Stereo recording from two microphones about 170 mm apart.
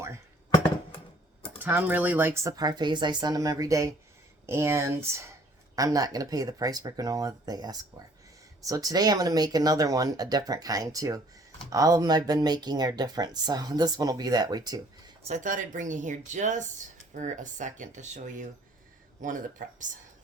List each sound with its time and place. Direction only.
1.5 s speech: 10° right (ahead or behind)
15.2 s speech: 45° right (ahead or behind)